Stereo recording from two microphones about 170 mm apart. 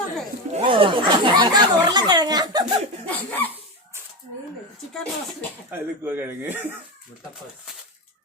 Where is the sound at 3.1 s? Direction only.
10° left (ahead or behind).